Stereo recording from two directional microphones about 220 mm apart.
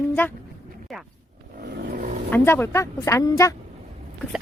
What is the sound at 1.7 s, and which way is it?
Vehicle, 40° right (ahead or behind).